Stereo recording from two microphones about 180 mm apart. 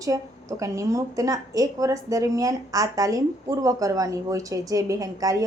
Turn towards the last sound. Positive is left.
turn(degrees=-20)  # may be behind; listen again after turning